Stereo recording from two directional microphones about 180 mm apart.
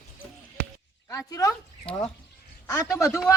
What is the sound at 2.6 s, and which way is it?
Speech, 15° left (ahead or behind).